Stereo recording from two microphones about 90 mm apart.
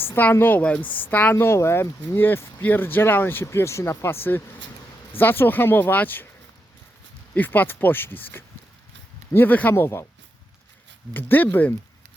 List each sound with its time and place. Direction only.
0.0 s speech: 20° left (ahead or behind)
7.3 s speech: 20° left (ahead or behind)
11.1 s speech: 20° left (ahead or behind)